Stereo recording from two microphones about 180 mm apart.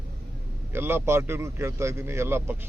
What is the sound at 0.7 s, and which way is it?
A man's voice, 15° right (ahead or behind).